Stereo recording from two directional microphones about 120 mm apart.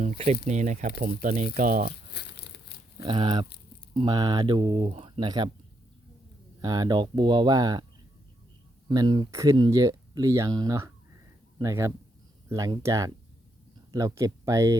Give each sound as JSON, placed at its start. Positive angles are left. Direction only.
{"t": 0.0, "sound": "speech", "side_deg": -65}
{"t": 3.0, "sound": "speech", "side_deg": -40}
{"t": 6.6, "sound": "speech", "side_deg": -35}
{"t": 8.9, "sound": "speech", "side_deg": -40}
{"t": 9.3, "sound": "speech", "side_deg": -25}